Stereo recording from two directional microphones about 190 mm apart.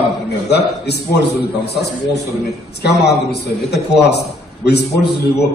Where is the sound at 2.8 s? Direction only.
60° left (ahead or behind).